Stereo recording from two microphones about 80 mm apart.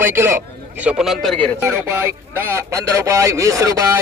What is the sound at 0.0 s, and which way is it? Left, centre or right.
Speech, right.